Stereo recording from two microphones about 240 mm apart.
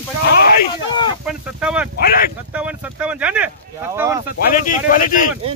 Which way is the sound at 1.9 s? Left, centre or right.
Left.